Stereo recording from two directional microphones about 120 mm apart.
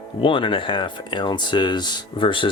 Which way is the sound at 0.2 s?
45° left (ahead or behind).